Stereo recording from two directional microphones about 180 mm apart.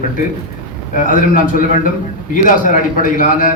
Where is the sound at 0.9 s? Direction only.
50° left (ahead or behind).